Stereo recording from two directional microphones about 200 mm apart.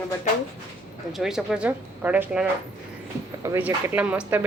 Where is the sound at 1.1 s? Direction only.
Centre (ahead or behind).